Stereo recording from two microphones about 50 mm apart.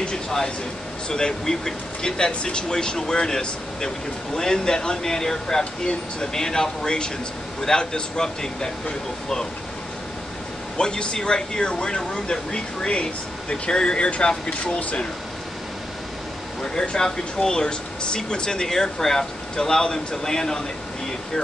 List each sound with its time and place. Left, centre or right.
0.0 s a sound: centre
1.0 s speech: centre
10.8 s speech: centre
16.7 s speech: centre